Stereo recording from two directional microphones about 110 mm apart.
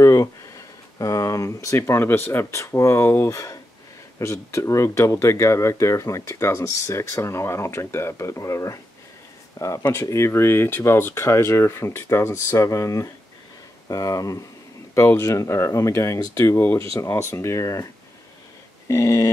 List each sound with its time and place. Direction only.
0.0 s speech: 30° left (ahead or behind)
18.9 s speech: 30° left (ahead or behind)